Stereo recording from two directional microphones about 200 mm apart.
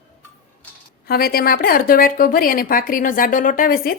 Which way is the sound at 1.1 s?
50° left (ahead or behind).